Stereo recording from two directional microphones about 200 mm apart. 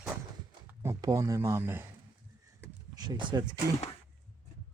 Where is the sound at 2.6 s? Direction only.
20° right (ahead or behind).